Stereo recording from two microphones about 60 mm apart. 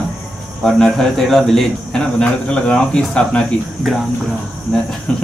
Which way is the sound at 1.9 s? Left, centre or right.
Centre.